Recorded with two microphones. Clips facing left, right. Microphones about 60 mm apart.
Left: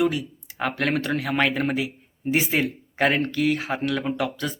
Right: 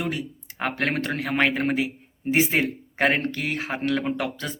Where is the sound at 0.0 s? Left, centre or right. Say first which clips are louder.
Left 6 dB; right.